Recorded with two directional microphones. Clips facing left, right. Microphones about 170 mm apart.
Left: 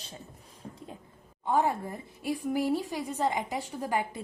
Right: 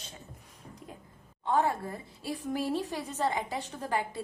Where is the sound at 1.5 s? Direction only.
15° left (ahead or behind).